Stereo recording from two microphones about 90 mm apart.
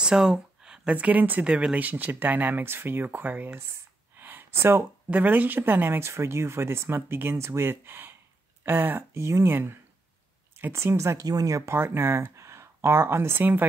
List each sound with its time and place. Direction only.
0.0 s speech: 5° right (ahead or behind)